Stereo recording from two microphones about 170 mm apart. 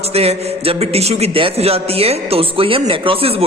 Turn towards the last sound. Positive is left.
turn(degrees=-35)  # may be behind; listen again after turning